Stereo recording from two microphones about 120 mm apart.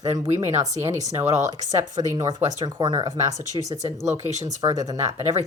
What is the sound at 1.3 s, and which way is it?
Speech, 85° right.